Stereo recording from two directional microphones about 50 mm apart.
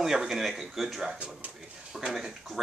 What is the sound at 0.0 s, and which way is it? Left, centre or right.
Speech, centre.